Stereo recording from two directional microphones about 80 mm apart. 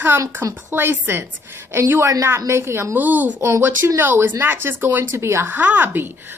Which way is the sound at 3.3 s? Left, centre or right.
Right.